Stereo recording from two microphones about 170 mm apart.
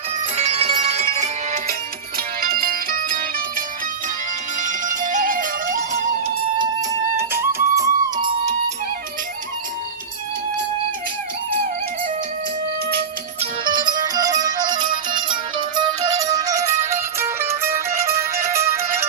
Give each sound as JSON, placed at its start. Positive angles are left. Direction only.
{"t": 0.3, "sound": "music", "side_deg": -40}
{"t": 2.1, "sound": "music", "side_deg": -60}
{"t": 4.6, "sound": "music", "side_deg": -50}
{"t": 6.6, "sound": "music", "side_deg": -15}
{"t": 13.4, "sound": "music", "side_deg": -25}